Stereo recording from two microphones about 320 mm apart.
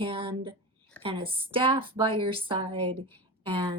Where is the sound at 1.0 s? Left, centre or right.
Centre.